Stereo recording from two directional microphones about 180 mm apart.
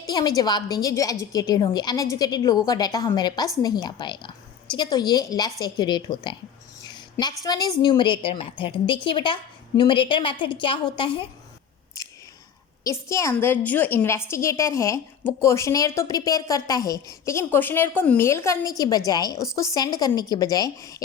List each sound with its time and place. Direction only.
0.1 s a woman's voice: 25° left (ahead or behind)
12.0 s a sound: 20° left (ahead or behind)
12.8 s a woman's voice: 15° left (ahead or behind)